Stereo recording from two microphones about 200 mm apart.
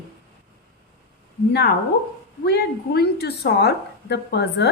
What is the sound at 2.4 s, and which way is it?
A woman's voice, 55° left (ahead or behind).